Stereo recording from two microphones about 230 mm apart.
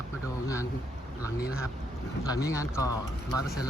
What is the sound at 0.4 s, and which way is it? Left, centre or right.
Speech, centre.